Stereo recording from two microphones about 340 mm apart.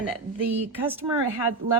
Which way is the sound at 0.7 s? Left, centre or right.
Centre.